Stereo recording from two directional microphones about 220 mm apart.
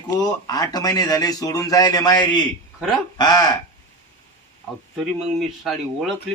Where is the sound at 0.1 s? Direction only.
15° left (ahead or behind).